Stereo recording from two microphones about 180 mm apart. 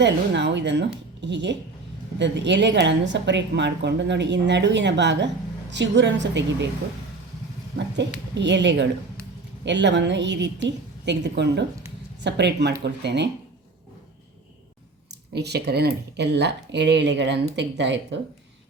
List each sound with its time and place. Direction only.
0.0 s a woman's voice: 75° right (ahead or behind)
8.4 s a woman's voice: 75° right (ahead or behind)
15.3 s a woman's voice: 65° right (ahead or behind); by 18.2 s 85° right